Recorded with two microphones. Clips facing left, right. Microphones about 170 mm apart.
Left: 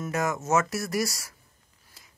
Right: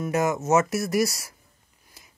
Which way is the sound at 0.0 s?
20° right (ahead or behind).